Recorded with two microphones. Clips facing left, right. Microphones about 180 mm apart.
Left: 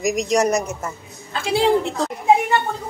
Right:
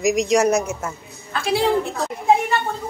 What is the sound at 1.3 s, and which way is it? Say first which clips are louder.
Speech: left 1 dB; 25° left (ahead or behind).